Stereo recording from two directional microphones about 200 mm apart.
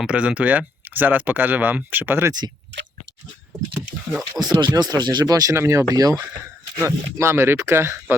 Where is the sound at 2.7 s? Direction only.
65° right (ahead or behind).